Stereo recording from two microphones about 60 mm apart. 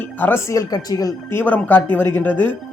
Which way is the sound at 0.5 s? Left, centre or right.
Left.